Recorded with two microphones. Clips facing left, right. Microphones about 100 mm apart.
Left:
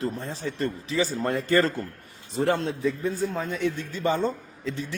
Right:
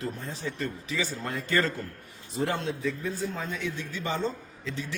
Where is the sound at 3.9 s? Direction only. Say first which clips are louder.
Left 5 dB; 45° left (ahead or behind).